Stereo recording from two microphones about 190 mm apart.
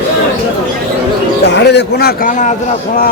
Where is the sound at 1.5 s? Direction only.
60° left (ahead or behind).